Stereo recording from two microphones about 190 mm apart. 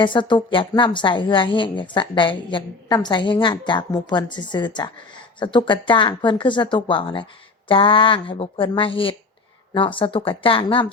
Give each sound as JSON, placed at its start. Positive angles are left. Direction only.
{"t": 0.0, "sound": "a woman's voice", "side_deg": 25}